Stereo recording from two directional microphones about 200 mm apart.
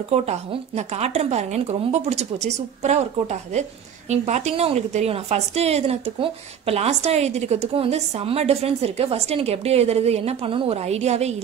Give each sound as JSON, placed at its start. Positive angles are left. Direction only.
{"t": 0.1, "sound": "a woman's voice", "side_deg": -30}